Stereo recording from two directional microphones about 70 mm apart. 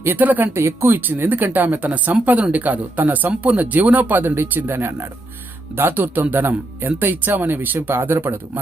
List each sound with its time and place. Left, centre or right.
0.0 s speech: right